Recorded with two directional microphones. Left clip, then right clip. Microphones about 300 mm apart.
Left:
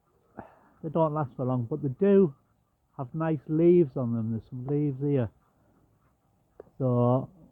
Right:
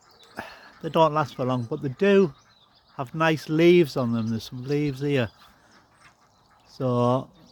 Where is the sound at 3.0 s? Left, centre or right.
Centre.